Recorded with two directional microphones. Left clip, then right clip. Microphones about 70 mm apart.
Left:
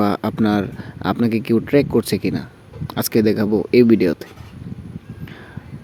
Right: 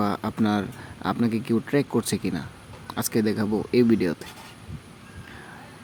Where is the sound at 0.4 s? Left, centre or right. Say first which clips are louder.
Left 6 dB; left.